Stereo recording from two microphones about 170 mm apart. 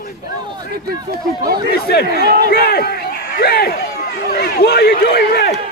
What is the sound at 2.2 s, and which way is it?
Speech, 70° right (ahead or behind).